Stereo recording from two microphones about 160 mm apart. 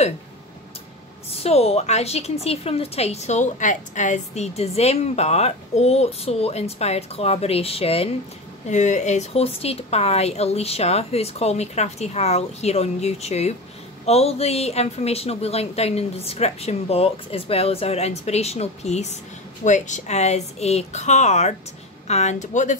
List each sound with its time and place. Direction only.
1.4 s a woman's voice: 40° left (ahead or behind)
8.6 s a woman's voice: 50° left (ahead or behind)